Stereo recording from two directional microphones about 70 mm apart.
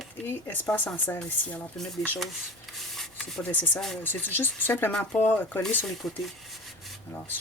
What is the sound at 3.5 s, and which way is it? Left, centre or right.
Speech, left.